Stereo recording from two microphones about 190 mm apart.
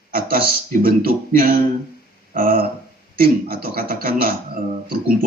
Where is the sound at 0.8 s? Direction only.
50° right (ahead or behind).